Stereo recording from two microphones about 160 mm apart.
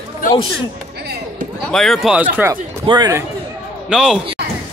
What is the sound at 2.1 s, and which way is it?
Speech, 10° right (ahead or behind).